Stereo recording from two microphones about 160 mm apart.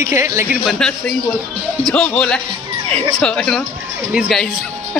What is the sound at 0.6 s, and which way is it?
Speech, 5° left (ahead or behind).